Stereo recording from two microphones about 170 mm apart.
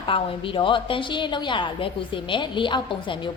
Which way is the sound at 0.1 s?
30° left (ahead or behind).